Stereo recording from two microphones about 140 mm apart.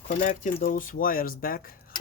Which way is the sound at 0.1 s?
70° left (ahead or behind).